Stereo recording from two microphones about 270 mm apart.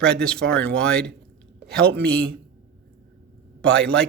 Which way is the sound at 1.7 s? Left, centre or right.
Right.